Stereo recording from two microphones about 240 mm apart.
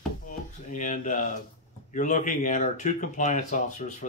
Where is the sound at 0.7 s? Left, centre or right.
Left.